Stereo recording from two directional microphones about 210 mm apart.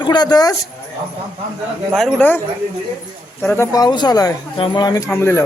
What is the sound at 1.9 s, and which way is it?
Speech, centre (ahead or behind).